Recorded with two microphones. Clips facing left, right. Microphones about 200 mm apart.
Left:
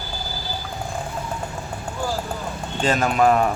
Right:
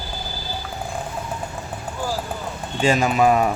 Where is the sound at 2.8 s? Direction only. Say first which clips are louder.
Right 1 dB; 10° right (ahead or behind).